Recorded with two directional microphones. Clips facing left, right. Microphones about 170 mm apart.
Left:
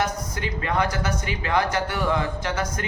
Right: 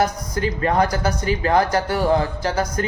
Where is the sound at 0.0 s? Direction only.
40° right (ahead or behind).